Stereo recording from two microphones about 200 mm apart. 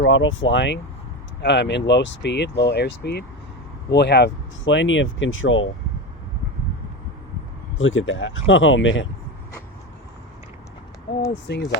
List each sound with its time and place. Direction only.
0.0 s speech: 75° left (ahead or behind)
7.8 s speech: 75° left (ahead or behind)
11.5 s speech: 60° left (ahead or behind)